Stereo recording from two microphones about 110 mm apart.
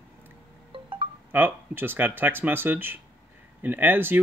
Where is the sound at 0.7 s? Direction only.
55° right (ahead or behind).